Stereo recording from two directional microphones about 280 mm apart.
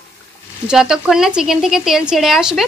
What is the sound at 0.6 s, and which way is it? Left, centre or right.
A woman's voice, centre.